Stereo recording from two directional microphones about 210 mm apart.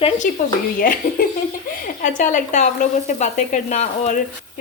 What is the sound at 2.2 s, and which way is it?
Sizzle, 35° left (ahead or behind).